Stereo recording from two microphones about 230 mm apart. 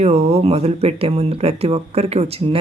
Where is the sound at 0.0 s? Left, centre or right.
Right.